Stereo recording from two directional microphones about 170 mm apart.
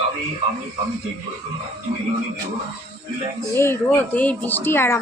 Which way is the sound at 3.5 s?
15° left (ahead or behind).